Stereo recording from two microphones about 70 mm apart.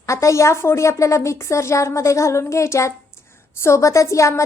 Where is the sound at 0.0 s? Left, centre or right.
Left.